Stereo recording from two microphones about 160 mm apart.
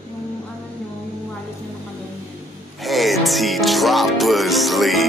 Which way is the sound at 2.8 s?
Centre (ahead or behind).